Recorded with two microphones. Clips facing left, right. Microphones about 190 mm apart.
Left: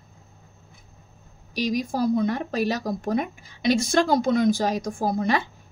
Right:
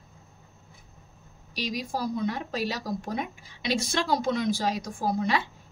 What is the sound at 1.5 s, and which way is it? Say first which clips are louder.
A woman's voice: left 6 dB; 45° left (ahead or behind).